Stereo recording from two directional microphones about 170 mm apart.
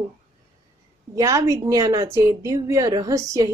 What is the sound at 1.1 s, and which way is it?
A woman's voice, 20° right (ahead or behind).